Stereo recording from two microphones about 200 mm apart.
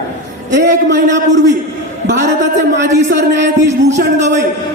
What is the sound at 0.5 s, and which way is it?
A man's voice, 60° right (ahead or behind).